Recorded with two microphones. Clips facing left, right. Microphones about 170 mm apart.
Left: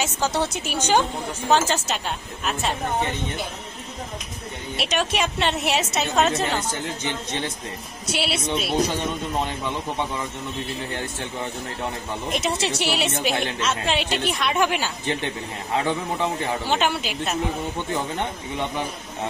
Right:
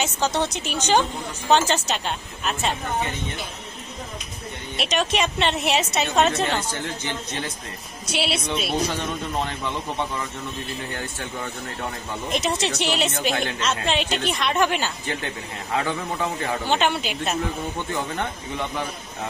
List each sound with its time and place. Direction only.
0.0 s a woman's voice: 5° left (ahead or behind)
4.7 s a woman's voice: 5° left (ahead or behind)
6.7 s speech: 20° left (ahead or behind)
8.1 s a woman's voice: centre (ahead or behind)
12.3 s a woman's voice: 5° left (ahead or behind)
15.0 s speech: 20° left (ahead or behind)
16.6 s a woman's voice: 5° left (ahead or behind)